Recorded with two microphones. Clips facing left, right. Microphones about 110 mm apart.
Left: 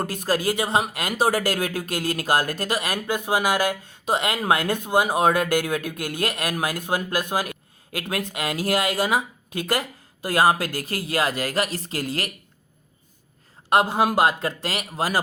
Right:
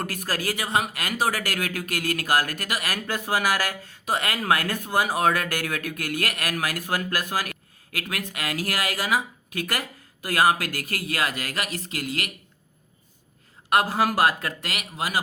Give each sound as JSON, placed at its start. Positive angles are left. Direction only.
{"t": 0.0, "sound": "speech", "side_deg": 25}
{"t": 13.7, "sound": "speech", "side_deg": 25}